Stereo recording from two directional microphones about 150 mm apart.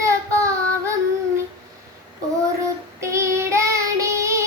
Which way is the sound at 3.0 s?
20° right (ahead or behind).